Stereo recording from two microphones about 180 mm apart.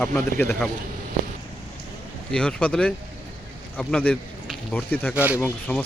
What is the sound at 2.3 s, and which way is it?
Speech, 5° left (ahead or behind).